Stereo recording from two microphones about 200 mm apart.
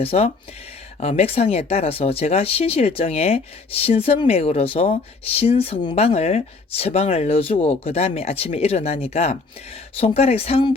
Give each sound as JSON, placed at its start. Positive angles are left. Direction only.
{"t": 0.0, "sound": "speech", "side_deg": 30}